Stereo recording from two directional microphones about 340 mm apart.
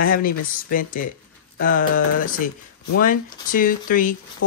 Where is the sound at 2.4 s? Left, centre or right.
Left.